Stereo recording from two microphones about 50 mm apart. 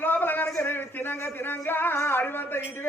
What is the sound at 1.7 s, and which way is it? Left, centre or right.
Speech, left.